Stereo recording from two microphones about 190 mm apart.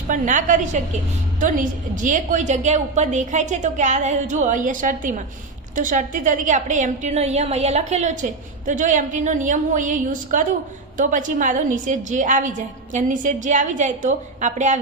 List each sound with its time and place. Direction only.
0.1 s a woman's voice: 40° right (ahead or behind)